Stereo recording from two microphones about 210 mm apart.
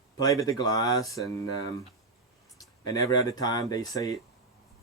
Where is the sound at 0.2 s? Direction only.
20° left (ahead or behind).